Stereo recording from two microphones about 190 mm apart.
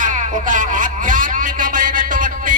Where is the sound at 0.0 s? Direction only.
40° right (ahead or behind).